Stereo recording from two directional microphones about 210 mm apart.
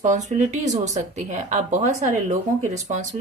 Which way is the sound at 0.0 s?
35° right (ahead or behind).